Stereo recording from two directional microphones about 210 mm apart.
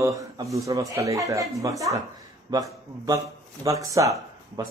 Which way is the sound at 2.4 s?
20° right (ahead or behind).